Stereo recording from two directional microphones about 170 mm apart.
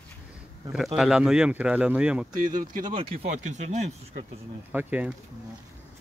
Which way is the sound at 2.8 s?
30° right (ahead or behind).